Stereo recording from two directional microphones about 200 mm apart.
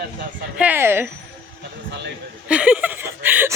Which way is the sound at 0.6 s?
10° right (ahead or behind).